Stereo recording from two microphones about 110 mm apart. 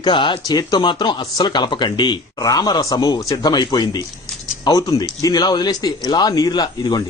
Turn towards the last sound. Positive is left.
turn(degrees=40)  # may be behind; listen again after turning